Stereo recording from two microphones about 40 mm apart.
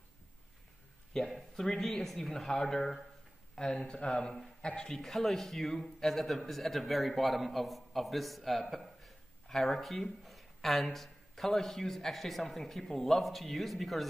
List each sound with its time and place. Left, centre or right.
1.3 s a man's voice: centre